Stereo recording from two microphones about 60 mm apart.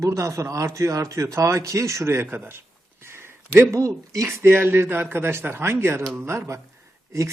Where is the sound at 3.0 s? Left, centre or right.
Right.